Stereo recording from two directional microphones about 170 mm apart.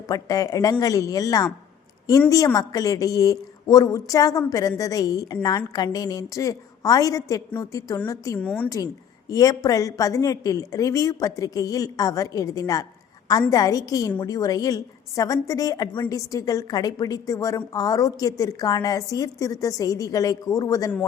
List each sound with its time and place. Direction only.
0.1 s a woman's voice: 20° left (ahead or behind)
8.4 s a woman's voice: 5° left (ahead or behind)
9.3 s a woman's voice: 20° left (ahead or behind)